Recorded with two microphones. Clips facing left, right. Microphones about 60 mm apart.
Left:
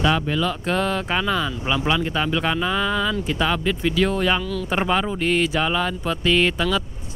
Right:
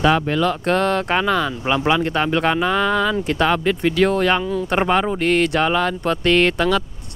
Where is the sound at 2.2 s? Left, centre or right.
Right.